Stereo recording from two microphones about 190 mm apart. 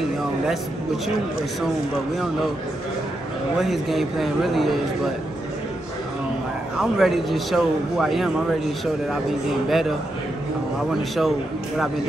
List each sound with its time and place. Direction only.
3.5 s a man's voice: centre (ahead or behind)
6.8 s a man's voice: centre (ahead or behind)
9.7 s a man's voice: centre (ahead or behind)